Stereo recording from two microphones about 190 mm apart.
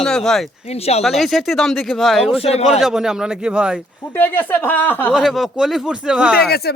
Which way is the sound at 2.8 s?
Centre (ahead or behind).